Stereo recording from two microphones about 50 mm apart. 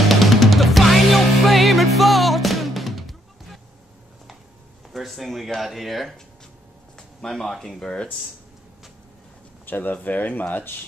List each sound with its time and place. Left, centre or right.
0.0 s music: centre
4.9 s speech: centre
9.7 s speech: left